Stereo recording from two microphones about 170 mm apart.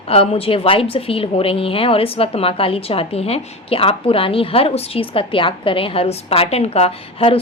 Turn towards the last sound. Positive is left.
turn(degrees=35)  # may be behind; listen again after turning